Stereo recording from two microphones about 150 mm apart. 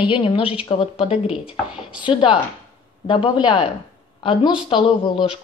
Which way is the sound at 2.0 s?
35° left (ahead or behind).